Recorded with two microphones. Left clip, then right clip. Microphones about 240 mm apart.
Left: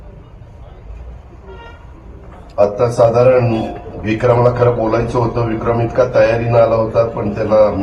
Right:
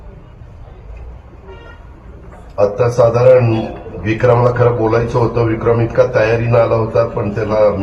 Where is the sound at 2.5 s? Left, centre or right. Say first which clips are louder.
Even; right.